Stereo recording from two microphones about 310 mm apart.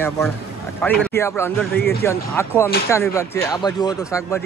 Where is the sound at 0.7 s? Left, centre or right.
Centre.